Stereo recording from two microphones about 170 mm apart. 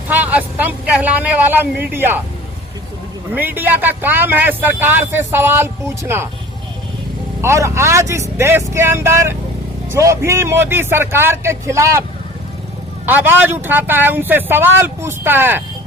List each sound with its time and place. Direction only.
0.1 s speech: 10° right (ahead or behind)
3.3 s speech: 10° right (ahead or behind)
7.4 s speech: 15° right (ahead or behind)
13.1 s speech: 10° right (ahead or behind)